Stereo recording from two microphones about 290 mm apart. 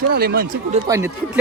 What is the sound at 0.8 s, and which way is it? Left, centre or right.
Speech, centre.